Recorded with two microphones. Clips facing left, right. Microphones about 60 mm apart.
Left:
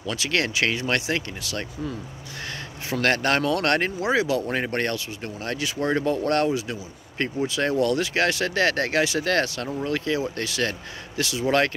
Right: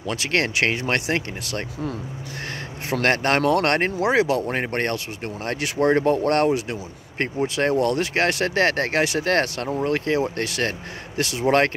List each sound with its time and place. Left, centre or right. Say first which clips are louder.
0.0 s speech: right 2 dB; right
3.0 s speech: right 2 dB; right
4.0 s speech: right 3 dB; right
4.5 s speech: right 1 dB; right